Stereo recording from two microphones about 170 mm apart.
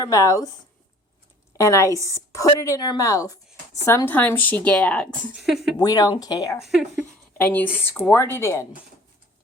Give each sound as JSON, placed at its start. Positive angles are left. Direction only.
{"t": 0.0, "sound": "a woman's voice", "side_deg": 20}
{"t": 1.5, "sound": "a woman's voice", "side_deg": 15}
{"t": 5.7, "sound": "a woman's voice", "side_deg": 20}
{"t": 6.6, "sound": "speech", "side_deg": 0}
{"t": 7.3, "sound": "a woman's voice", "side_deg": 10}